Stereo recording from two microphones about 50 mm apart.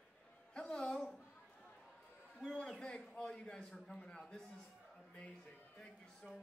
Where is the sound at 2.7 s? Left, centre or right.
Centre.